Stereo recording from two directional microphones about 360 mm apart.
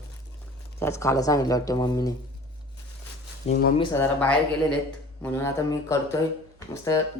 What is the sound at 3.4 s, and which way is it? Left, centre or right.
Speech, left.